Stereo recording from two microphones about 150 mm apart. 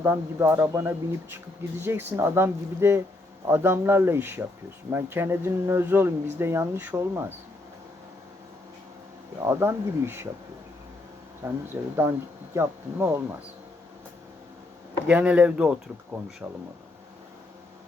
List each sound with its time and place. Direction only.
0.0 s speech: 15° right (ahead or behind)
9.4 s speech: 15° right (ahead or behind)
11.4 s speech: 15° right (ahead or behind)
15.0 s speech: 10° right (ahead or behind)